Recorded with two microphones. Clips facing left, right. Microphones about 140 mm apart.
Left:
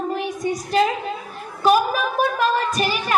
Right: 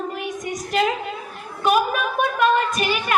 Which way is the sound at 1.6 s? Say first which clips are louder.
Left 2 dB; 35° left (ahead or behind).